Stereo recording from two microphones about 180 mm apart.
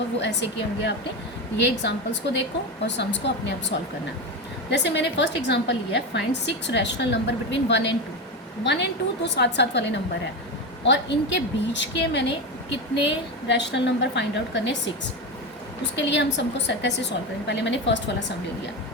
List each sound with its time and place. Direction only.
0.2 s a woman's voice: 70° left (ahead or behind)
16.0 s a woman's voice: 80° left